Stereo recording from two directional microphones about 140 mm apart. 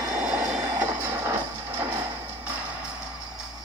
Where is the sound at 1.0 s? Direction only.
15° right (ahead or behind).